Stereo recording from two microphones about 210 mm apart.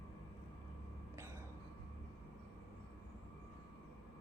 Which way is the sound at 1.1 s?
10° right (ahead or behind).